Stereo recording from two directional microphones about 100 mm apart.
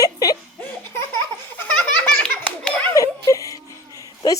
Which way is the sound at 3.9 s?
35° left (ahead or behind).